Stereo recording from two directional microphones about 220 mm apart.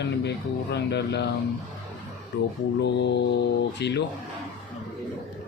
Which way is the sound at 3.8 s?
50° left (ahead or behind).